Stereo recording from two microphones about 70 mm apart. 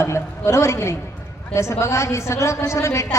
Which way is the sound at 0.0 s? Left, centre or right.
Left.